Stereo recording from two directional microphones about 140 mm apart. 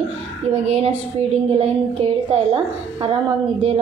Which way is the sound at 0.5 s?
50° right (ahead or behind).